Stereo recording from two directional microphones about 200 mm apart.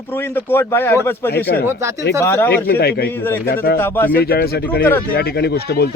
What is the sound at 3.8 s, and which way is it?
Speech, 10° left (ahead or behind).